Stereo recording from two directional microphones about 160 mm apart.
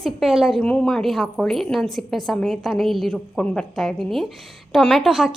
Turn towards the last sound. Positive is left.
turn(degrees=0)  # may be behind; listen again after turning